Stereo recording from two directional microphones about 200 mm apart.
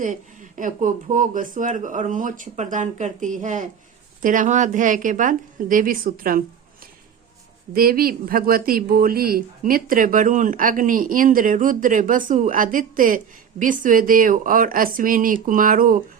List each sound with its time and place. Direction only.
0.0 s speech: 40° right (ahead or behind)
7.7 s speech: 45° right (ahead or behind)